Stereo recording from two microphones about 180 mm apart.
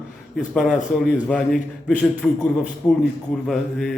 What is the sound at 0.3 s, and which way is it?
A man's voice, centre (ahead or behind).